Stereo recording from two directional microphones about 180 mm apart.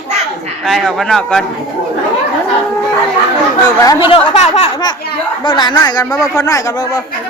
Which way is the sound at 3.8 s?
25° left (ahead or behind).